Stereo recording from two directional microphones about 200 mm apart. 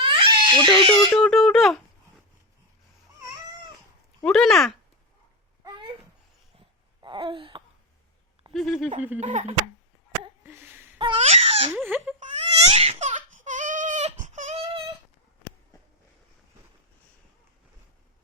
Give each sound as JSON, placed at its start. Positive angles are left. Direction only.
{"t": 0.0, "sound": "crying", "side_deg": -25}
{"t": 1.1, "sound": "speech", "side_deg": 0}
{"t": 4.2, "sound": "speech", "side_deg": 0}
{"t": 5.6, "sound": "babbling", "side_deg": -25}
{"t": 7.0, "sound": "wail", "side_deg": -25}
{"t": 8.5, "sound": "speech", "side_deg": 0}
{"t": 9.2, "sound": "speech", "side_deg": -30}
{"t": 10.4, "sound": "a sound", "side_deg": -10}
{"t": 10.9, "sound": "baby cry", "side_deg": -25}
{"t": 11.8, "sound": "speech", "side_deg": -10}
{"t": 12.2, "sound": "baby cry", "side_deg": -30}
{"t": 15.7, "sound": "a sound", "side_deg": 15}